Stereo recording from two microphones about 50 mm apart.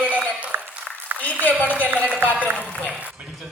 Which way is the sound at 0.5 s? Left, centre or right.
Right.